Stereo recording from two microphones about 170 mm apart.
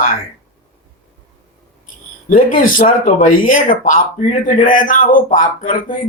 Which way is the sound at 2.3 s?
55° left (ahead or behind).